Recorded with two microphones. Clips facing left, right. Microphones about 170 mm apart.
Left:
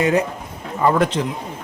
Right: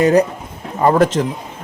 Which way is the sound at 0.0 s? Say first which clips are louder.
Right 5 dB; 35° right (ahead or behind).